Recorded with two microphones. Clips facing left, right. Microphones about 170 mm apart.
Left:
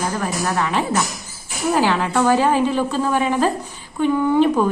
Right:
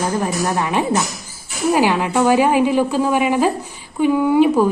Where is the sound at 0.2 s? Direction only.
20° right (ahead or behind).